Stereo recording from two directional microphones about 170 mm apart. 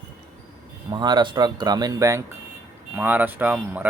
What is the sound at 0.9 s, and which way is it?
Speech, 25° right (ahead or behind).